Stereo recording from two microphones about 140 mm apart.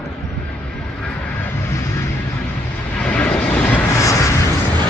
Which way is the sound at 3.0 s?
10° left (ahead or behind).